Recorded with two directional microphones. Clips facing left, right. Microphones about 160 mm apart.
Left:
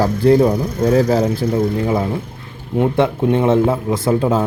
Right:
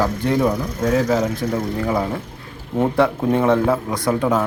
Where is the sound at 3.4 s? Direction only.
25° left (ahead or behind).